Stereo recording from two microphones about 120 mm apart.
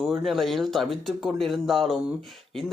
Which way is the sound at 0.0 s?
Centre (ahead or behind).